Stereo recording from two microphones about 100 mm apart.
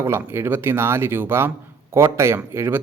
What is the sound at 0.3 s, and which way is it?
Speech, 25° right (ahead or behind).